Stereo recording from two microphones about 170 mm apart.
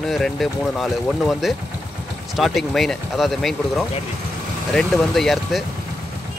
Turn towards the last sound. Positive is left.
turn(degrees=0)  # may be behind; listen again after turning